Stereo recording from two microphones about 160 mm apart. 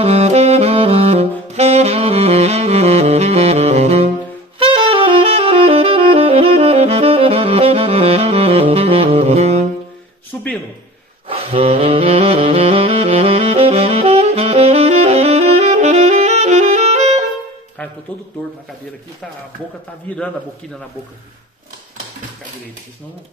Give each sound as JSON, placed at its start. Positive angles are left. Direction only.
{"t": 0.0, "sound": "saxophone", "side_deg": -40}
{"t": 10.3, "sound": "a sound", "side_deg": 10}
{"t": 11.2, "sound": "saxophone", "side_deg": -40}